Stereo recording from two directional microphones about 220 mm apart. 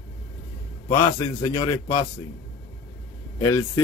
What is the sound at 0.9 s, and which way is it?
Speech, 20° left (ahead or behind).